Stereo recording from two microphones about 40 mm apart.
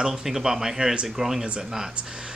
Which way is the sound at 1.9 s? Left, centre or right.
Right.